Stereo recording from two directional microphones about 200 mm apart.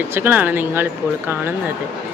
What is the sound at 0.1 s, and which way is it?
Speech, 10° right (ahead or behind).